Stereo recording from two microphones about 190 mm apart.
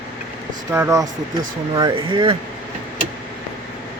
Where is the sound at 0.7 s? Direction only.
15° right (ahead or behind).